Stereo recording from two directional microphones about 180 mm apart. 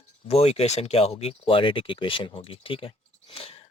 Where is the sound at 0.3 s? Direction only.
35° left (ahead or behind).